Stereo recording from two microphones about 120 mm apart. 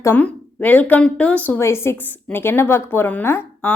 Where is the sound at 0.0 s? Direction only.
15° left (ahead or behind).